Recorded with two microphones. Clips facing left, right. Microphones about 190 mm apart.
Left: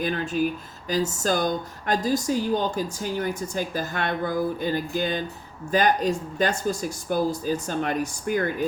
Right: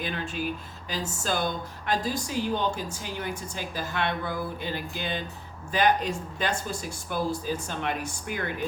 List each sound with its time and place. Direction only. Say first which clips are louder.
0.0 s speech: left 7 dB; 45° left (ahead or behind)